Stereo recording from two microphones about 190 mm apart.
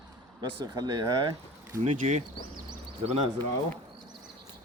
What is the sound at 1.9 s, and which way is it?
Speech, 40° right (ahead or behind).